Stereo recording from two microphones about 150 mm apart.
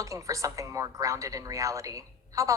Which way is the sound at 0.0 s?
20° right (ahead or behind).